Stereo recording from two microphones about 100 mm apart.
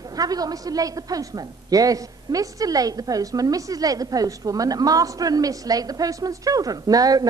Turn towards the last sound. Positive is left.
turn(degrees=-40)  # may be behind; listen again after turning